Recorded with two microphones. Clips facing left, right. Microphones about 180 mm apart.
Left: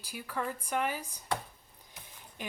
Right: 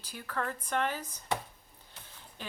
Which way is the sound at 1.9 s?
15° left (ahead or behind).